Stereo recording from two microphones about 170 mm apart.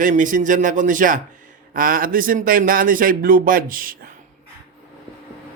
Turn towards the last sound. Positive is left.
turn(degrees=-55)  # may be behind; listen again after turning